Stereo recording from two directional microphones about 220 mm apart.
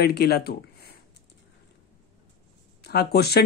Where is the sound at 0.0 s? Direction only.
45° left (ahead or behind).